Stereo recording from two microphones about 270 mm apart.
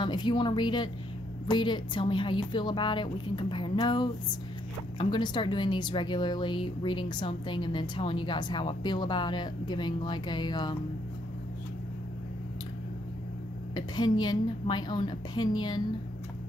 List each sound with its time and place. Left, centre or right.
0.0 s a woman's voice: centre
13.7 s a woman's voice: centre